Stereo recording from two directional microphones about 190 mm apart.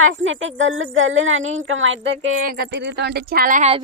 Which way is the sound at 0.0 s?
90° right.